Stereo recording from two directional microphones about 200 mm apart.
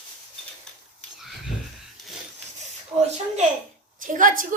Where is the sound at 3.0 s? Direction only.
35° right (ahead or behind).